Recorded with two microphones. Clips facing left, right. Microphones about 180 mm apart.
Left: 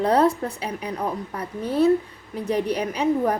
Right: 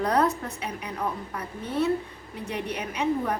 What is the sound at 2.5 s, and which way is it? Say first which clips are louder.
Speech: left 9 dB; 35° left (ahead or behind).